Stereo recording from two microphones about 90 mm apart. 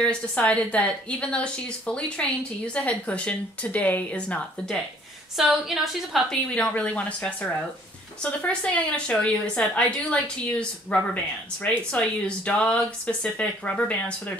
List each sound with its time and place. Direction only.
0.0 s a woman's voice: 10° left (ahead or behind)
5.4 s a woman's voice: 5° right (ahead or behind)
6.5 s a woman's voice: 15° left (ahead or behind)